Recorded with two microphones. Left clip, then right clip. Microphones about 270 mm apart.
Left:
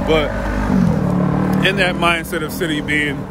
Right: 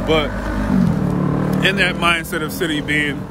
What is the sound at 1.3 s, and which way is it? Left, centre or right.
Vehicle, left.